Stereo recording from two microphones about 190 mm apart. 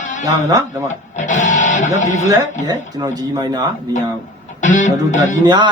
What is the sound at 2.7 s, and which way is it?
Speech, 20° right (ahead or behind).